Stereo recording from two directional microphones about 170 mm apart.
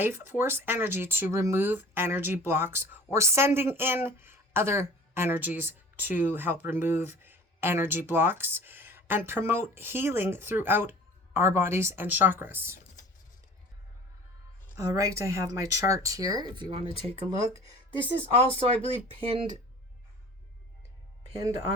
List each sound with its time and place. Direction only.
0.0 s speech: 15° right (ahead or behind)
14.8 s speech: 20° right (ahead or behind)
18.2 s speech: 35° right (ahead or behind)